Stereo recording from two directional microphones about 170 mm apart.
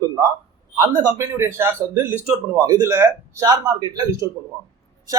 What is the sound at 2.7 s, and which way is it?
A man's voice, 20° right (ahead or behind).